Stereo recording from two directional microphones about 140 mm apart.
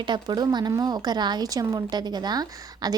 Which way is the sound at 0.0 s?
30° right (ahead or behind).